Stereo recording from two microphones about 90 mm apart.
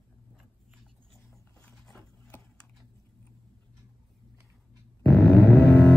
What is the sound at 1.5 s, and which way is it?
Mechanisms, 10° left (ahead or behind).